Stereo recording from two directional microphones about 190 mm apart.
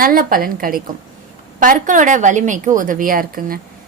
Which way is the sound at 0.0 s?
50° right (ahead or behind).